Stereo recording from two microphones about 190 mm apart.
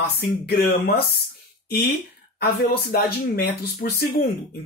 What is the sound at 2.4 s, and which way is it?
Speech, 55° left (ahead or behind).